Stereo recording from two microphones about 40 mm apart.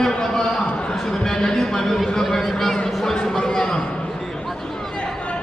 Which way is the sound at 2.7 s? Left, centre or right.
Centre.